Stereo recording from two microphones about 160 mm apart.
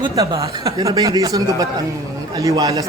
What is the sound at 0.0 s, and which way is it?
Speech, 25° right (ahead or behind).